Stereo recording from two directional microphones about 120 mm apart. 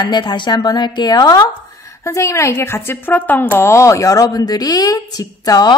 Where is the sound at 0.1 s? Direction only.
35° left (ahead or behind).